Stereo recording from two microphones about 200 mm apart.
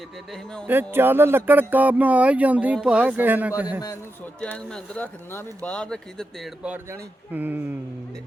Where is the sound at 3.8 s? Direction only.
15° left (ahead or behind).